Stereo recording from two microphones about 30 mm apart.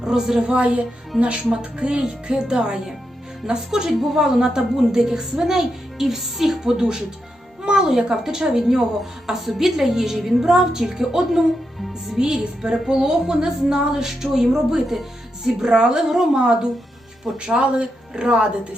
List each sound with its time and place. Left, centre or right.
0.0 s a woman's voice: centre
0.4 s a woman's voice: right; by 6.7 s centre
6.7 s speech: right
7.6 s music: right
8.1 s a woman's voice: centre
15.6 s speech: right
17.3 s a woman's voice: centre
18.3 s speech: right